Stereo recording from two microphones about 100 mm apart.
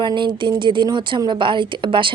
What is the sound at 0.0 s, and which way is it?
A woman's voice, 55° right (ahead or behind).